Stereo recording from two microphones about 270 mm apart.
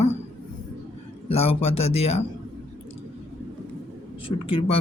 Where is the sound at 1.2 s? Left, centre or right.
Left.